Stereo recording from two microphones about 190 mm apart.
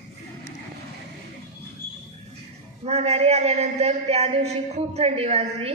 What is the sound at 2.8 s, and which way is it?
A man's voice, 35° right (ahead or behind).